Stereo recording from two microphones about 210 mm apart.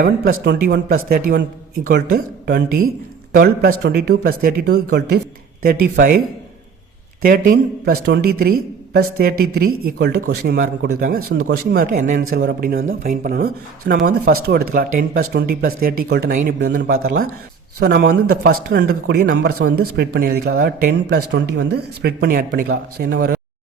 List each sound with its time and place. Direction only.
0.4 s speech: 45° right (ahead or behind)